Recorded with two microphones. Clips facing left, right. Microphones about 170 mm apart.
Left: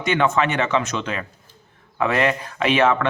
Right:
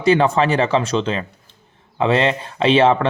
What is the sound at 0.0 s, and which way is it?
Speech, 30° right (ahead or behind).